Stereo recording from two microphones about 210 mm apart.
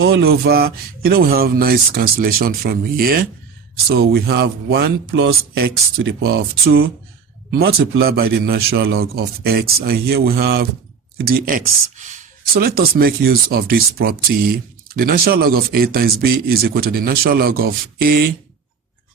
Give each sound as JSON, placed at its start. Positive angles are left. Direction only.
{"t": 0.0, "sound": "speech", "side_deg": -50}